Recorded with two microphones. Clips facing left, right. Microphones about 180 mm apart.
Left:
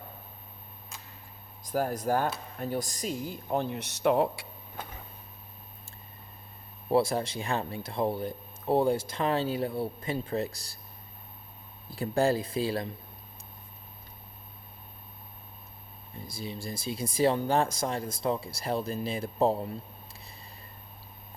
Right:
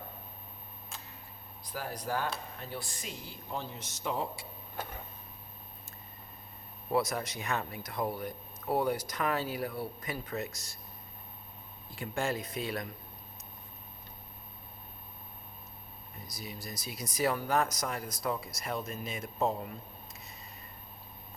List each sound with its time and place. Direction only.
1.6 s speech: 45° left (ahead or behind); by 4.4 s 65° left (ahead or behind)
6.9 s speech: 30° left (ahead or behind)
11.9 s speech: 35° left (ahead or behind)
16.1 s speech: 30° left (ahead or behind)